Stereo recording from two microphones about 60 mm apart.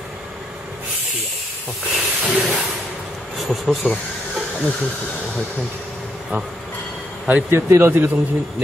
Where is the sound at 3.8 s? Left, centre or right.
Left.